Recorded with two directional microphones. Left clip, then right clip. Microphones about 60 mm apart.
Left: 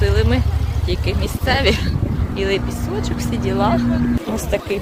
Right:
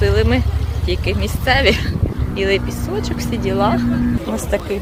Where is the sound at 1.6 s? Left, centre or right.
Centre.